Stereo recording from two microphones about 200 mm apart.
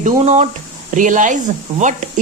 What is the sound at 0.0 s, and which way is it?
Speech, 35° right (ahead or behind).